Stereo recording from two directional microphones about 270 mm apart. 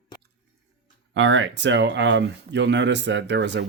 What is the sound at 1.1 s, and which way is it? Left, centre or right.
Speech, right.